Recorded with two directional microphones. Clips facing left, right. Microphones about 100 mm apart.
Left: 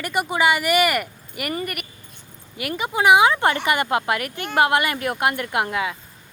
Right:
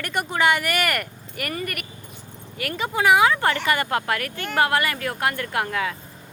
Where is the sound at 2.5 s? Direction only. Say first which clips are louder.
Left 1 dB; 10° left (ahead or behind).